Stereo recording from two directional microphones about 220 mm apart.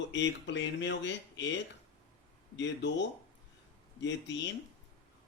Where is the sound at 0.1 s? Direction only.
55° left (ahead or behind).